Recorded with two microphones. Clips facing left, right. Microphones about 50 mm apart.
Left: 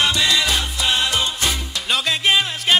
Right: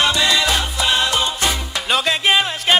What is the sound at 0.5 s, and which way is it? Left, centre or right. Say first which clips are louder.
Music: right 2 dB; right.